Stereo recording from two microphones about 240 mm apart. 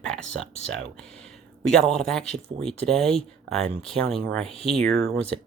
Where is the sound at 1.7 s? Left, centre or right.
Centre.